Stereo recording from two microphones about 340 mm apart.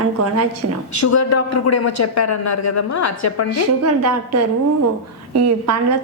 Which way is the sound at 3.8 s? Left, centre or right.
Right.